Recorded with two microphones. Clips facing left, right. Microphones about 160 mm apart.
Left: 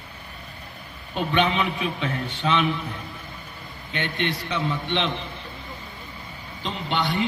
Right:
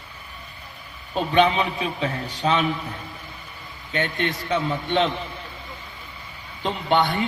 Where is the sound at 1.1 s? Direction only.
35° right (ahead or behind).